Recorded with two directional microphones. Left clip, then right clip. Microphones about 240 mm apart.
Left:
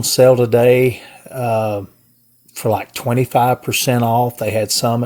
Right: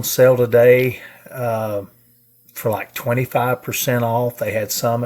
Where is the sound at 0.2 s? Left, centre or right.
Left.